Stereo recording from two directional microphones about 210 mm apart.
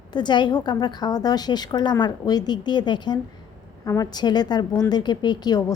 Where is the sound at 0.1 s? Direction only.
20° left (ahead or behind).